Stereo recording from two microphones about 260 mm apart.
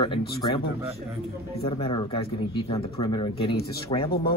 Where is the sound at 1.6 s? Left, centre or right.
Left.